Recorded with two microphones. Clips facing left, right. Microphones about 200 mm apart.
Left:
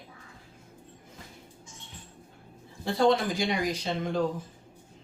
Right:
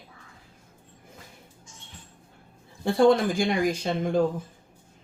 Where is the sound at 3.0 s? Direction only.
50° right (ahead or behind).